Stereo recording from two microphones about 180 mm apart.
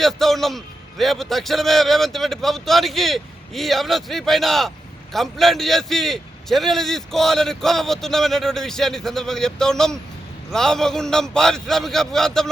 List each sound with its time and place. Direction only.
0.0 s a man's voice: centre (ahead or behind)